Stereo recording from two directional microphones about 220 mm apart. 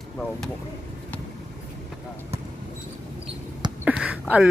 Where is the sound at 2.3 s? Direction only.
30° right (ahead or behind).